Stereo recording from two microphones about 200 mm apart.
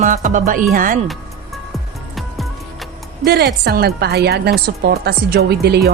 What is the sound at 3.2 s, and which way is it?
A woman's voice, 55° right (ahead or behind).